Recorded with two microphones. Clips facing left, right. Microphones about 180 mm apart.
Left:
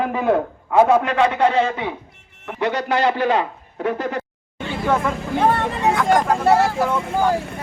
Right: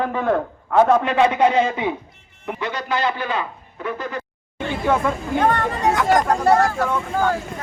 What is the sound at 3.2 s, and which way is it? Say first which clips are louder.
Speech: left 6 dB; 90° left.